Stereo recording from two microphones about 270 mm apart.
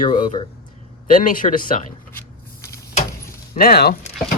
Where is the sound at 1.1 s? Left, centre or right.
Left.